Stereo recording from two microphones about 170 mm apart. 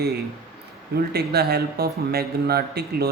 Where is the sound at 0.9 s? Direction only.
70° right (ahead or behind).